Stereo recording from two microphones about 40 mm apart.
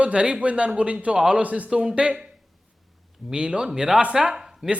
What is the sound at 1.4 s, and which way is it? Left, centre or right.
Speech, right.